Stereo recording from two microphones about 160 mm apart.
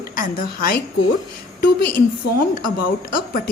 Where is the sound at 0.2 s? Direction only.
60° left (ahead or behind).